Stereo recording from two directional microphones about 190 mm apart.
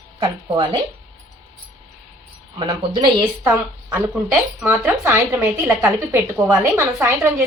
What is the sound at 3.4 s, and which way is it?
Speech, 10° right (ahead or behind).